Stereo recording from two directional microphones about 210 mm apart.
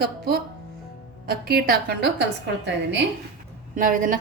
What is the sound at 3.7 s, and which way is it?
Speech, 40° right (ahead or behind).